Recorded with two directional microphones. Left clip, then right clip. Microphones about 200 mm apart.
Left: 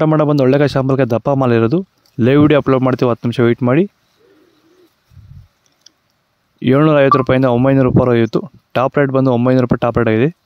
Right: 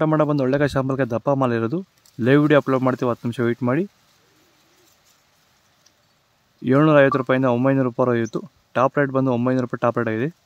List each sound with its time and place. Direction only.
0.0 s speech: 35° left (ahead or behind)
6.6 s speech: 35° left (ahead or behind)